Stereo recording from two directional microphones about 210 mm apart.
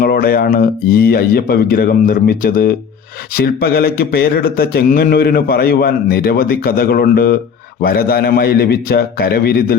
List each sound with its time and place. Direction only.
0.0 s speech: 45° left (ahead or behind)